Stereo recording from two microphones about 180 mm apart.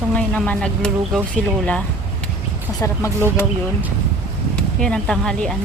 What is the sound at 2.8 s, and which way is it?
Speech, 15° left (ahead or behind).